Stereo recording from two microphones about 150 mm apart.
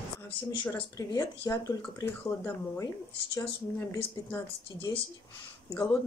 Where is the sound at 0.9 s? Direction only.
25° left (ahead or behind).